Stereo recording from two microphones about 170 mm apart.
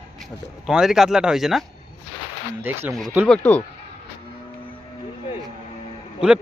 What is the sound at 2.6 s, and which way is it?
Speech, 10° right (ahead or behind).